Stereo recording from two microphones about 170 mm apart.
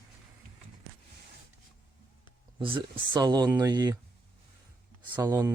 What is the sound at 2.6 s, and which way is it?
Speech, 30° right (ahead or behind).